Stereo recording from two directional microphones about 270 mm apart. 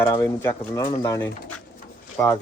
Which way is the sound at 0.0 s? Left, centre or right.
Centre.